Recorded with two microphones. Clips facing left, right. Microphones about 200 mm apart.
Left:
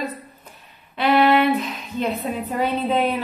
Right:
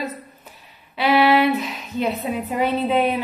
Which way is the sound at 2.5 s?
10° right (ahead or behind).